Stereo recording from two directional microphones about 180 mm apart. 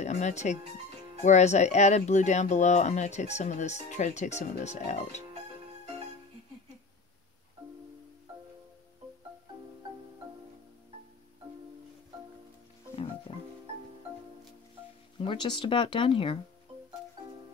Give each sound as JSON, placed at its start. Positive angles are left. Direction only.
{"t": 0.0, "sound": "speech", "side_deg": 40}
{"t": 13.3, "sound": "music", "side_deg": 30}
{"t": 15.1, "sound": "speech", "side_deg": 25}